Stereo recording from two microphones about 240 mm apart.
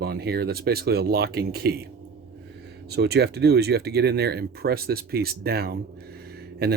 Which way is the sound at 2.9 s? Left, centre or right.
Right.